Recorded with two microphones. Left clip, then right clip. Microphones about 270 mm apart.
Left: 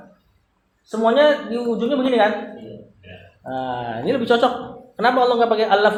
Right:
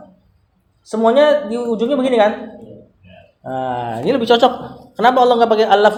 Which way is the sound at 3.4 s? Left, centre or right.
Right.